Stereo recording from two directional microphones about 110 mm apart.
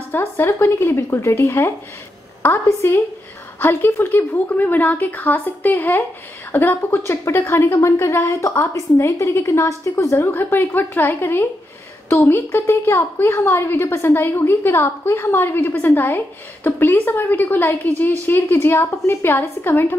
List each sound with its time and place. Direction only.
0.1 s a woman's voice: 20° left (ahead or behind)